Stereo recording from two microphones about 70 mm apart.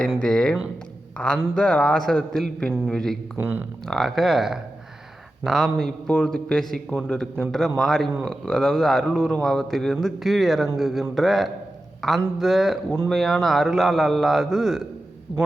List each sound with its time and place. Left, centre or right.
0.2 s a sound: centre
1.2 s a man's voice: centre
3.3 s speech: right
3.8 s a man's voice: centre
6.1 s a man's voice: centre